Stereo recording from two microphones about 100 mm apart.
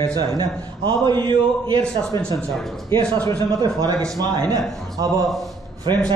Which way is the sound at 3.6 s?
40° right (ahead or behind).